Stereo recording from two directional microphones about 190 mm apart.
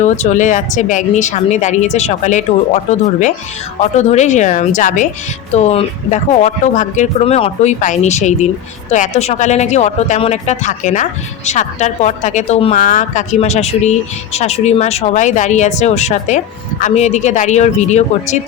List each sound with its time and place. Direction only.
0.0 s speech: 40° left (ahead or behind)